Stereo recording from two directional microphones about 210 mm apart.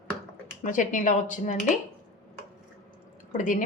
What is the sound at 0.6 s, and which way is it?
A woman's voice, 40° left (ahead or behind).